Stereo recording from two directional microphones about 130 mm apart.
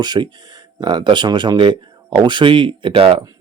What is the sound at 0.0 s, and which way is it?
Speech, 35° right (ahead or behind).